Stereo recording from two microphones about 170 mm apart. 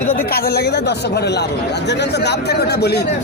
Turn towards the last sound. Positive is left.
turn(degrees=75)  # may be behind; listen again after turning